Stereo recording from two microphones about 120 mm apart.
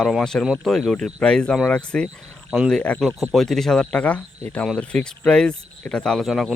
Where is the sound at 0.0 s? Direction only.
5° left (ahead or behind).